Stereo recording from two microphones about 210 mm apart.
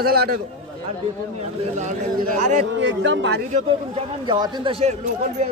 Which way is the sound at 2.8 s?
60° right (ahead or behind).